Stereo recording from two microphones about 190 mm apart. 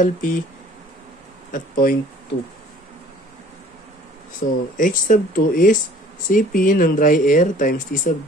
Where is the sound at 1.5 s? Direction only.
50° left (ahead or behind).